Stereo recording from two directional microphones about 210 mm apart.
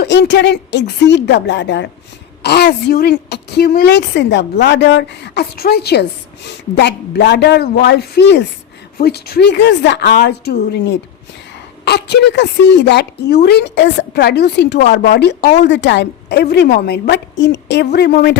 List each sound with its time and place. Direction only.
0.0 s a woman's voice: 55° left (ahead or behind)